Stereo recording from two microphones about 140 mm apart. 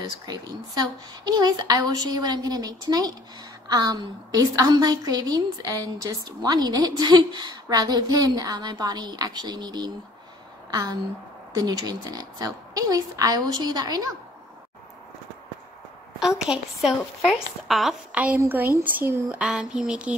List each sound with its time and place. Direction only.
0.3 s a woman's voice: 30° right (ahead or behind)
16.2 s a woman's voice: 5° right (ahead or behind)